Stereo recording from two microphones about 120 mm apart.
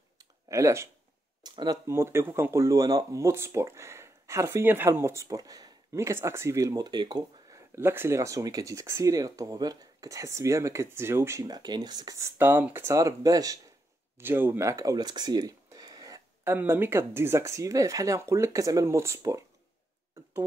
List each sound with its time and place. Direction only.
0.2 s a sound: 25° right (ahead or behind)
1.4 s speech: 35° right (ahead or behind)
1.9 s speech: 20° right (ahead or behind)
7.7 s speech: 20° right (ahead or behind)
12.4 s speech: 15° right (ahead or behind)
14.1 s a sound: 20° right (ahead or behind)
16.5 s speech: 20° right (ahead or behind)